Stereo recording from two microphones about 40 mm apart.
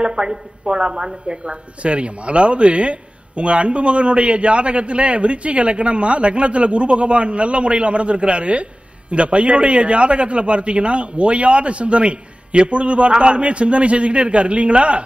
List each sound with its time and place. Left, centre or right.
0.0 s a woman's voice: right